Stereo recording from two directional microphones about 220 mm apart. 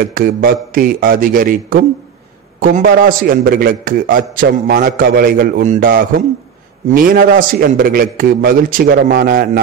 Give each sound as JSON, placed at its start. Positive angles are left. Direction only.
{"t": 0.0, "sound": "a man's voice", "side_deg": -40}